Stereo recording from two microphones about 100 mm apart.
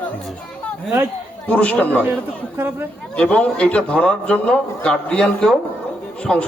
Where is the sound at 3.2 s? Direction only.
10° left (ahead or behind).